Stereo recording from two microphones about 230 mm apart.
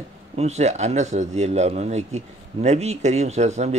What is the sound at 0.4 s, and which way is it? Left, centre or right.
Speech, right.